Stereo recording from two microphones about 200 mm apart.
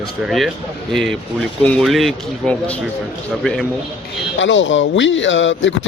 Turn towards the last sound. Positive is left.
turn(degrees=70)  # may be behind; listen again after turning